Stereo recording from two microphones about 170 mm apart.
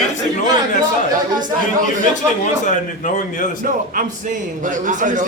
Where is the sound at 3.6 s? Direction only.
55° right (ahead or behind).